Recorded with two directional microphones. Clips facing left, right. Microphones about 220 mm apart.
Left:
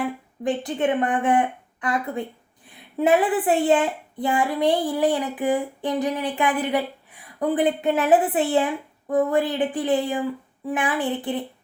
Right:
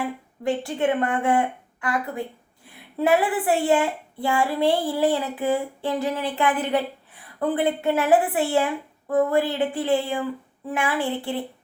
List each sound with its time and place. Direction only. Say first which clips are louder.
0.4 s a woman's voice: even; 20° left (ahead or behind)